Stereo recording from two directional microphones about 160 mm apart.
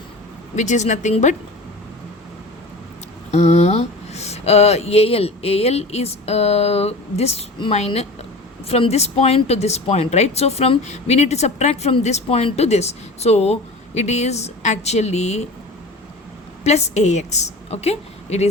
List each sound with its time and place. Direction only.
0.5 s a woman's voice: 50° left (ahead or behind)
3.3 s a woman's voice: 45° left (ahead or behind)
16.6 s a woman's voice: 45° left (ahead or behind)